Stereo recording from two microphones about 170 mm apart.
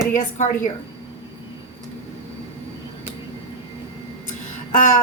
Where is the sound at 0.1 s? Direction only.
45° left (ahead or behind).